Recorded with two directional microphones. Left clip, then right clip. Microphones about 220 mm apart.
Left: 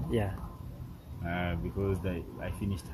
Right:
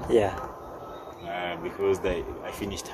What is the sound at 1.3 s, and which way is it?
Speech, centre (ahead or behind).